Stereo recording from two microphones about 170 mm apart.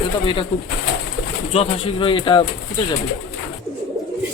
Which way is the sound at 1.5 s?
30° left (ahead or behind).